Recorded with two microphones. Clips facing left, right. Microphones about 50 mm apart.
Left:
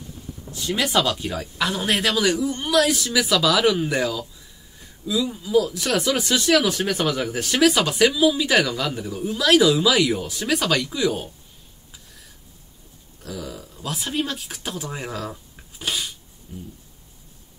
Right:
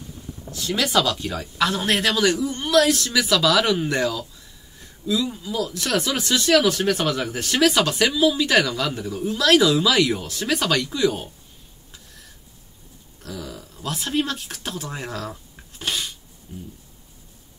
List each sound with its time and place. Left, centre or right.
0.5 s speech: centre
13.2 s speech: centre
15.8 s a sound: centre